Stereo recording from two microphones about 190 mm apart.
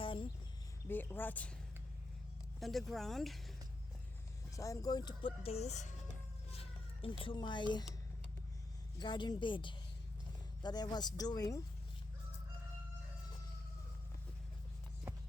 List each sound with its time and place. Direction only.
0.0 s a sound: 25° left (ahead or behind)
0.9 s a woman's voice: 10° left (ahead or behind)
2.6 s speech: centre (ahead or behind)
4.5 s speech: 15° left (ahead or behind)
9.0 s speech: 25° left (ahead or behind)